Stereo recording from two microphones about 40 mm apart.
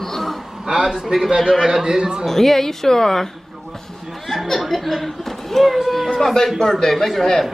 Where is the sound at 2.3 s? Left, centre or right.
Centre.